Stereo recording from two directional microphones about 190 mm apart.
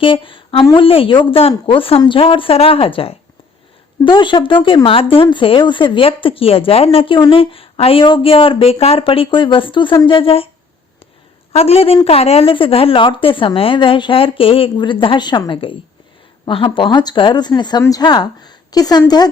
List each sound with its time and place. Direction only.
0.0 s speech: 25° left (ahead or behind)
11.5 s speech: 30° left (ahead or behind)